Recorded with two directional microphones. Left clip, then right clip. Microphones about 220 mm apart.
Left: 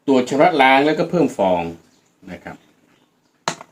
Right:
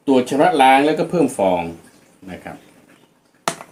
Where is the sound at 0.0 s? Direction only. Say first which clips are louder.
Even; 20° right (ahead or behind).